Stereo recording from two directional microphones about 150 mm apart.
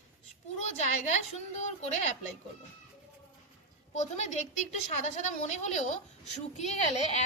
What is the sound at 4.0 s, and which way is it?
A woman's voice, 50° left (ahead or behind).